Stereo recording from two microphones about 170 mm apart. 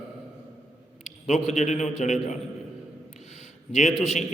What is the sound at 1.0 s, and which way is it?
A man's voice, 45° left (ahead or behind).